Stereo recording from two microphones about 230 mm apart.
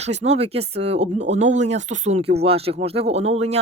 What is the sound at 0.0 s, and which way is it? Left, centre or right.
A woman's voice, right.